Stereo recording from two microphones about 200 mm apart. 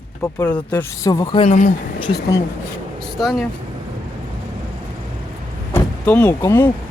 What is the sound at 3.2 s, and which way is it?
Speech, centre (ahead or behind).